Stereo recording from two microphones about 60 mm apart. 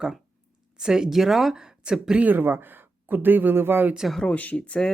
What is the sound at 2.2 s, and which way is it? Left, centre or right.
Speech, right.